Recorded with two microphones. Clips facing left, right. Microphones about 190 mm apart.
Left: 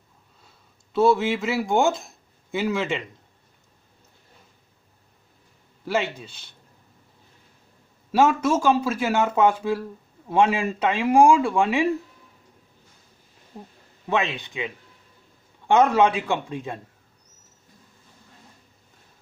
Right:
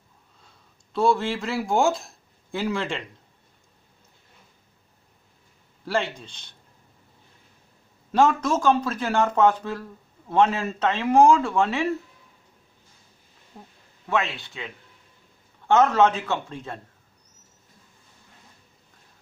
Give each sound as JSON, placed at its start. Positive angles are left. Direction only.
{"t": 0.9, "sound": "speech", "side_deg": 5}
{"t": 5.9, "sound": "speech", "side_deg": 5}
{"t": 8.1, "sound": "speech", "side_deg": 10}
{"t": 14.0, "sound": "a man's voice", "side_deg": 20}